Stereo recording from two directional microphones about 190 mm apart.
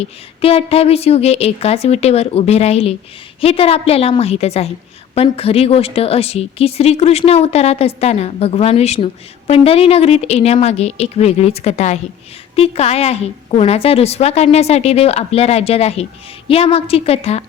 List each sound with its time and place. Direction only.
0.0 s a woman's voice: 30° left (ahead or behind)